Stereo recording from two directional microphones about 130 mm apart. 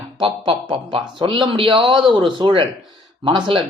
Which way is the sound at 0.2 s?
40° right (ahead or behind).